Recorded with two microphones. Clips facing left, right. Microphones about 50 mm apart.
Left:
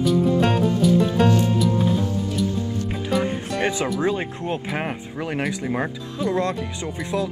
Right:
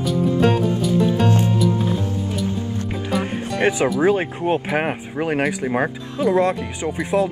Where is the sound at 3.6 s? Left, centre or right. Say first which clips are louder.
Right 6 dB; centre.